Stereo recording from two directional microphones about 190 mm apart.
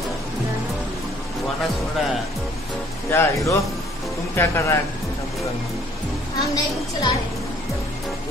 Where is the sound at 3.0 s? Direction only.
15° left (ahead or behind).